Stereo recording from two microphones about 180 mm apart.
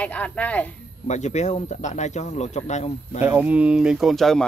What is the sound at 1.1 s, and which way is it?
Speech, 40° left (ahead or behind).